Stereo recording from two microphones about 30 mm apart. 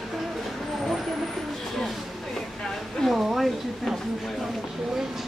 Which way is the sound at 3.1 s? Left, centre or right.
Centre.